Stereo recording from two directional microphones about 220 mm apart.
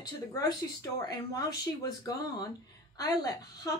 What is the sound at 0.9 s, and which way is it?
A woman's voice, 15° left (ahead or behind).